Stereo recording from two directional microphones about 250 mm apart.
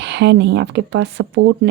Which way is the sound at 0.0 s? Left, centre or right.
Right.